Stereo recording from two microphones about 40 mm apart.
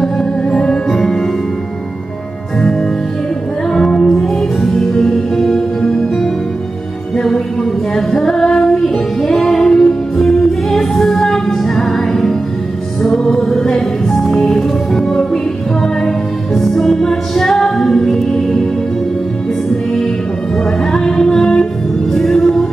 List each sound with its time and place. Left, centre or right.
0.0 s music: centre
3.7 s music: centre
16.5 s music: centre
20.8 s music: centre